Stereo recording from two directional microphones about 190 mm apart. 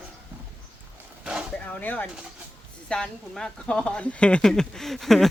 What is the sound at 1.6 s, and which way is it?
Speech, 10° left (ahead or behind).